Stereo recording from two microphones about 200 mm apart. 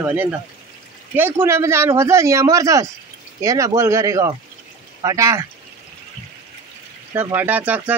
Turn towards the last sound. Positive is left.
turn(degrees=-10)  # may be behind; listen again after turning